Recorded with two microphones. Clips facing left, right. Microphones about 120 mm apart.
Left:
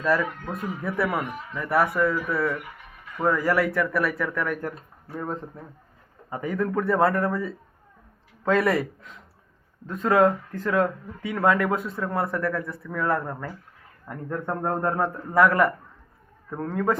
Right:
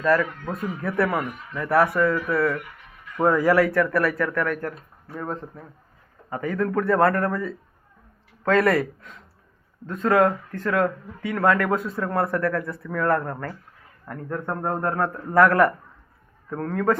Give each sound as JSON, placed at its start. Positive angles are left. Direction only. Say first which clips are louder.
{"t": 0.0, "sound": "a man's voice", "louder": "right 3 dB", "side_deg": 10}
{"t": 3.2, "sound": "speech", "louder": "right 4 dB", "side_deg": -10}
{"t": 3.5, "sound": "speech", "louder": "right 4 dB", "side_deg": 5}
{"t": 5.2, "sound": "speech", "louder": "right 1 dB", "side_deg": 0}
{"t": 6.3, "sound": "a man's voice", "louder": "right 2 dB", "side_deg": 10}
{"t": 11.7, "sound": "speech", "louder": "right 2 dB", "side_deg": 0}
{"t": 14.1, "sound": "a man's voice", "louder": "even", "side_deg": 15}
{"t": 15.3, "sound": "a man's voice", "louder": "right 3 dB", "side_deg": 5}